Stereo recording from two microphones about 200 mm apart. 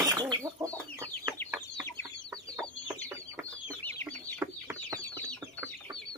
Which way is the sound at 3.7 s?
10° left (ahead or behind).